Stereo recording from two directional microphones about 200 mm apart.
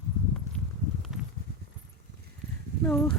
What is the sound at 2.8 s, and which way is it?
Speech, 10° left (ahead or behind).